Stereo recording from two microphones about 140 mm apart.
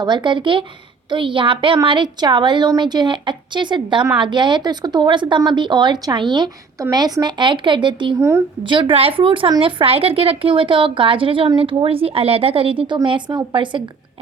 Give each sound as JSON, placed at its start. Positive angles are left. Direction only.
{"t": 0.0, "sound": "speech", "side_deg": -35}